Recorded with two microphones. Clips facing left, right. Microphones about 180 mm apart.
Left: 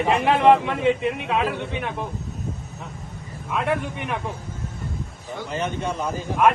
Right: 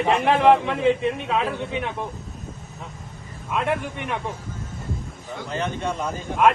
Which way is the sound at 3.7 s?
Centre (ahead or behind).